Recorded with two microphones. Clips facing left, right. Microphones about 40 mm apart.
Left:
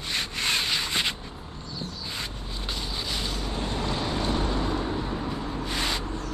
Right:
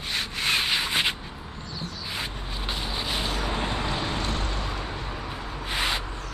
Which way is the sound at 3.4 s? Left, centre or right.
Right.